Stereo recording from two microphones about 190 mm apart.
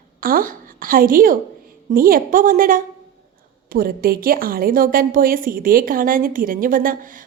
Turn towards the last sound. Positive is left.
turn(degrees=-45)  # may be behind; listen again after turning